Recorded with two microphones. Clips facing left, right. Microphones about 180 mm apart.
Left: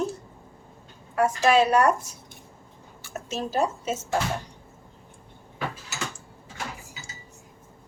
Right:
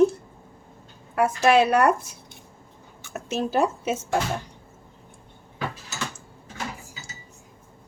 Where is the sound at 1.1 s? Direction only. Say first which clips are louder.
Right 1 dB; 60° right (ahead or behind).